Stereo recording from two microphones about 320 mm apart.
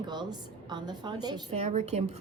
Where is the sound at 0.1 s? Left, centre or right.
Centre.